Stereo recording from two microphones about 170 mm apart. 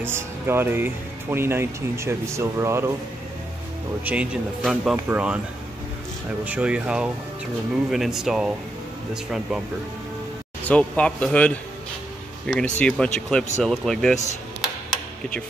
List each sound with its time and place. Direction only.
0.0 s speech: 15° right (ahead or behind)
4.0 s speech: 10° right (ahead or behind)
6.4 s speech: 5° right (ahead or behind)
10.6 s speech: 5° left (ahead or behind)